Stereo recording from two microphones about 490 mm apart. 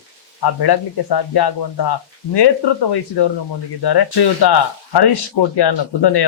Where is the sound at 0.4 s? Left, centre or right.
Left.